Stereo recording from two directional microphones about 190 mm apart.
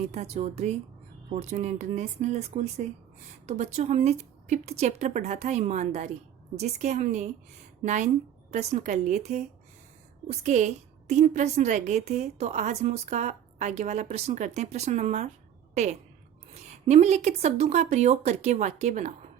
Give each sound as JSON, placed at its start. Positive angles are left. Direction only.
{"t": 0.1, "sound": "a woman's voice", "side_deg": -35}
{"t": 10.4, "sound": "a woman's voice", "side_deg": -40}